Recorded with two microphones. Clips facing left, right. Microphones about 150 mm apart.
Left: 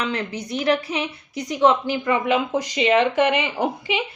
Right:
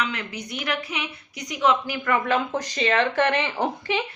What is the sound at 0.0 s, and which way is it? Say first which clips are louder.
A woman's voice: left 4 dB; 30° left (ahead or behind).